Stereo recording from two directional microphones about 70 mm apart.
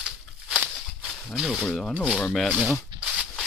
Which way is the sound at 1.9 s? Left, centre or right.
Centre.